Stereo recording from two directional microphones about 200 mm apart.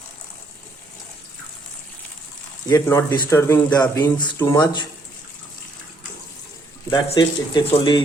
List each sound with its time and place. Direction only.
2.6 s speech: 15° left (ahead or behind)
6.9 s speech: 25° left (ahead or behind)